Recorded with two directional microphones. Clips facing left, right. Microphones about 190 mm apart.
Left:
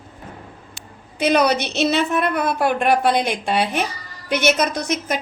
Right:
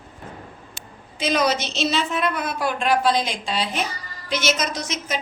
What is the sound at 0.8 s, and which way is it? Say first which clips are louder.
A woman's voice: left 6 dB; 60° left (ahead or behind).